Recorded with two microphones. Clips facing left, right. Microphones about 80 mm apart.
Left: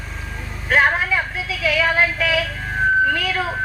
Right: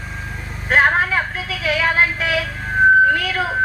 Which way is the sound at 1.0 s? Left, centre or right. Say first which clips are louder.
Right 2 dB; right.